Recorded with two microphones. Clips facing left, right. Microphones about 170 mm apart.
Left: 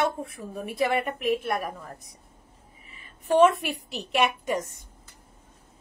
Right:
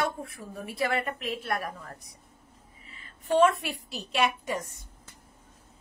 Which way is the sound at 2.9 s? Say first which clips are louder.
Left 3 dB; 20° left (ahead or behind).